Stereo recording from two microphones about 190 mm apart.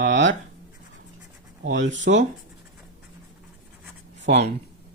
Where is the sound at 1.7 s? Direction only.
75° right (ahead or behind).